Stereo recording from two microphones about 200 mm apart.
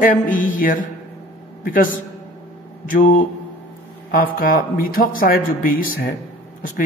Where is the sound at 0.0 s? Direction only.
40° left (ahead or behind).